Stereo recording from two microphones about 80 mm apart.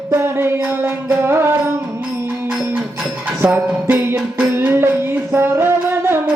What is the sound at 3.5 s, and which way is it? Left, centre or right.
Music, right.